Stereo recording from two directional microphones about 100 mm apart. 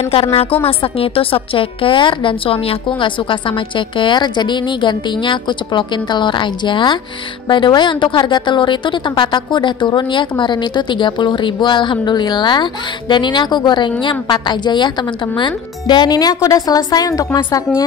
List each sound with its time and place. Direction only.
0.1 s a woman's voice: 70° left (ahead or behind); by 17.4 s 40° left (ahead or behind)